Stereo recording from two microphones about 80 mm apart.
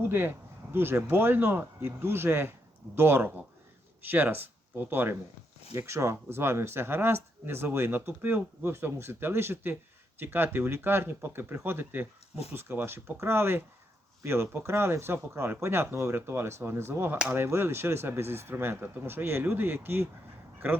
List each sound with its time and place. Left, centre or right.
0.1 s speech: right